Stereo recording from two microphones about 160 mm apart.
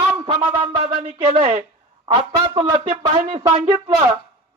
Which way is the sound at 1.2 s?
35° right (ahead or behind).